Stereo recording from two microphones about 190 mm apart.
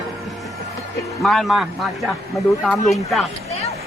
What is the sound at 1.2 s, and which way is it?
Speech, centre (ahead or behind).